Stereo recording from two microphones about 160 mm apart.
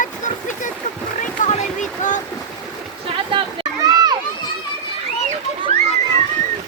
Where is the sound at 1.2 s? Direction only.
50° left (ahead or behind).